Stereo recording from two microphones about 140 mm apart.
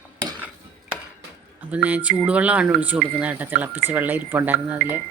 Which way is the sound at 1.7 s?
10° right (ahead or behind).